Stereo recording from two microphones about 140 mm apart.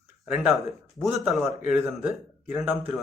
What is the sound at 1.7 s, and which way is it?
Speech, 15° right (ahead or behind).